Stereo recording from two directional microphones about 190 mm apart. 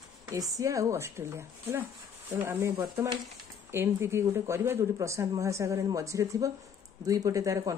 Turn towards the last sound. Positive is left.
turn(degrees=-15)  # may be behind; listen again after turning